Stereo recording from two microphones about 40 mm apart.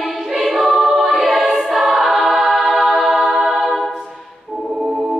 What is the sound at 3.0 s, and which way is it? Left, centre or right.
Music, centre.